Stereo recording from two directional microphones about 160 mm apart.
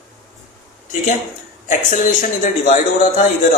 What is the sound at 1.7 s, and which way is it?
A man's voice, 55° left (ahead or behind).